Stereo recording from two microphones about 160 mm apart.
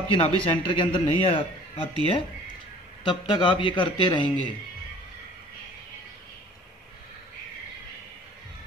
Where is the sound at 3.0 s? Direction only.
30° left (ahead or behind).